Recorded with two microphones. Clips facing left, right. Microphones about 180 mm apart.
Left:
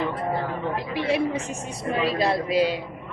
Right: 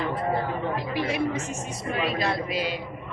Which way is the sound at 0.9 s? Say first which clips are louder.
Left 4 dB; 30° left (ahead or behind).